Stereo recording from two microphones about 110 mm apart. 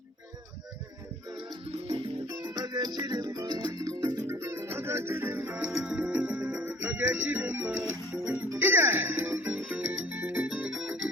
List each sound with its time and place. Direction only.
1.9 s music: 45° right (ahead or behind)
4.3 s music: 25° right (ahead or behind); by 11.0 s 10° right (ahead or behind)